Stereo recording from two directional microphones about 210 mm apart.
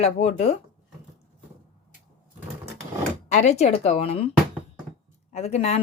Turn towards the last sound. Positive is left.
turn(degrees=30)  # may be behind; listen again after turning